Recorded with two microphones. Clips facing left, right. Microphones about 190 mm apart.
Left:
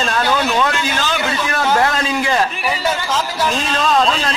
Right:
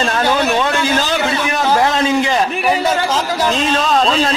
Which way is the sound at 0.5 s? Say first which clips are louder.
Right 3 dB; 35° right (ahead or behind).